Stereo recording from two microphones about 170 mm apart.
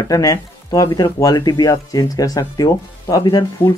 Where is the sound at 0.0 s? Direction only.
20° left (ahead or behind).